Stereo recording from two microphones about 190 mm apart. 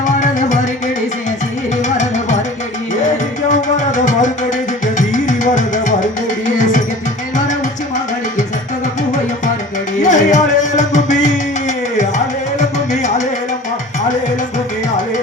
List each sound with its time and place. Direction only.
0.0 s music: 40° left (ahead or behind)
3.5 s music: 40° left (ahead or behind)
10.0 s music: 40° left (ahead or behind)